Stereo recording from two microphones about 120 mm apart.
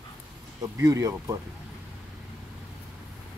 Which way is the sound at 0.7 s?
25° right (ahead or behind).